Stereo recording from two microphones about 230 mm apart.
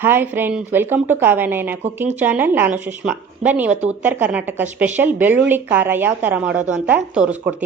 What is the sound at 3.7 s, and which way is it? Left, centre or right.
Speech, right.